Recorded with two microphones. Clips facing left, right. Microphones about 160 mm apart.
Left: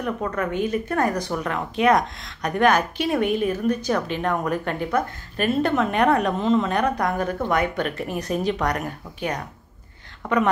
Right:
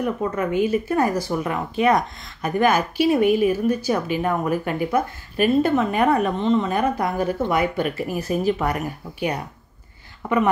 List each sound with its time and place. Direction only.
0.0 s speech: 10° right (ahead or behind)